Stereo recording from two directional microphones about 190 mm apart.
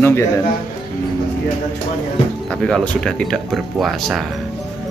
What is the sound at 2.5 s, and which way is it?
Speech, 5° left (ahead or behind).